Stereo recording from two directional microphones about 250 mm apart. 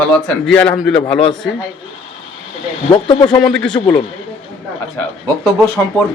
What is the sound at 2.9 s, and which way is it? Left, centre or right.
Speech, centre.